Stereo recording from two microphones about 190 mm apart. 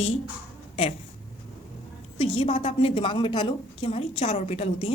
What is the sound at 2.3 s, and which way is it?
A woman's voice, 30° left (ahead or behind).